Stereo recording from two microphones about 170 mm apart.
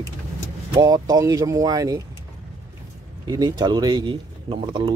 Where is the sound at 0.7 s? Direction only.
20° right (ahead or behind).